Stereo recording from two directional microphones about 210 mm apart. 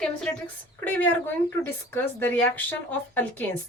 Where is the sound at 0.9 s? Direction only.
10° left (ahead or behind).